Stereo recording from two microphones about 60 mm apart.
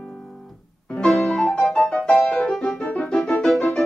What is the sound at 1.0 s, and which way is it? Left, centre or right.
Music, centre.